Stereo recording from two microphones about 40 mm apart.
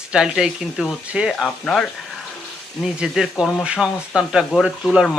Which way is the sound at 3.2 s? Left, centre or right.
Right.